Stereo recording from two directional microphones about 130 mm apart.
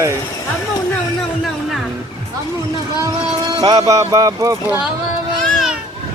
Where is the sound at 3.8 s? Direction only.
25° right (ahead or behind).